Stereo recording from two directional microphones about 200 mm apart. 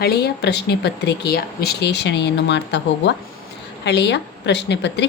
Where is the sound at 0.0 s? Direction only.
55° left (ahead or behind).